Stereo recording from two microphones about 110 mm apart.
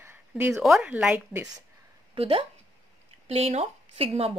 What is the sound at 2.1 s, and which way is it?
Speech, 60° right (ahead or behind).